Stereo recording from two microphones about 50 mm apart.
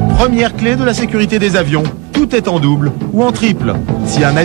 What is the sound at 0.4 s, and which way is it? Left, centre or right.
A man's voice, right.